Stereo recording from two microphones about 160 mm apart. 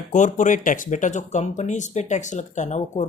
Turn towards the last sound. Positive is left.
turn(degrees=45)  # may be behind; listen again after turning